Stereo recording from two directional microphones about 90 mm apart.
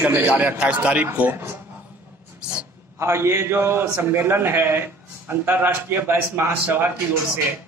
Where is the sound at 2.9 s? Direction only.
30° right (ahead or behind).